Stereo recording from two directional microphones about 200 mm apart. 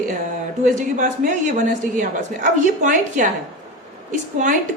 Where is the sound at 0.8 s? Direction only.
40° right (ahead or behind).